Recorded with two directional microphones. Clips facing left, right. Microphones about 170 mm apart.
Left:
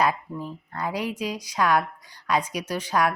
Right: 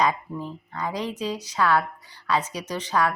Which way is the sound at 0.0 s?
10° left (ahead or behind).